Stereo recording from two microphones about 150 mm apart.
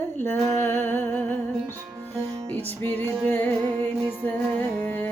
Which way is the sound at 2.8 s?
15° left (ahead or behind).